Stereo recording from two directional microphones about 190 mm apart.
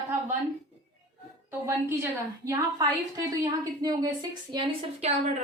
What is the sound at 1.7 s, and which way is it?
A woman's voice, 10° right (ahead or behind).